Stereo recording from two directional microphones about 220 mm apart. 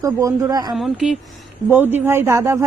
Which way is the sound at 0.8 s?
Centre (ahead or behind).